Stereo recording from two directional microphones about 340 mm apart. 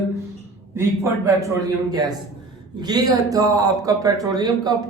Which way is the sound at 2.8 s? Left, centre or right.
Centre.